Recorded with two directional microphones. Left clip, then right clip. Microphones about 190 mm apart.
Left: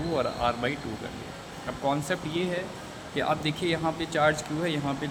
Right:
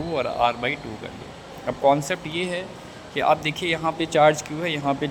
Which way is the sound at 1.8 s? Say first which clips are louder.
Right 9 dB; 20° right (ahead or behind).